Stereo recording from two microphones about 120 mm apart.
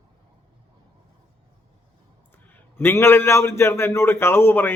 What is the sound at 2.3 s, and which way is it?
A man's voice, 15° left (ahead or behind).